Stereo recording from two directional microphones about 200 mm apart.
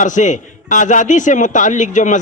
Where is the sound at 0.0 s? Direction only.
40° left (ahead or behind).